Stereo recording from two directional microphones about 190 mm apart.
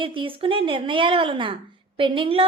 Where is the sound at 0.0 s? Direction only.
25° right (ahead or behind).